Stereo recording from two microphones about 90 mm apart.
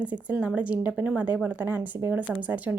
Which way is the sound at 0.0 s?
15° right (ahead or behind).